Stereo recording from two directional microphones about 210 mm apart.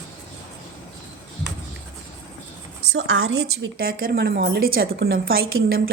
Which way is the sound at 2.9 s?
65° right (ahead or behind).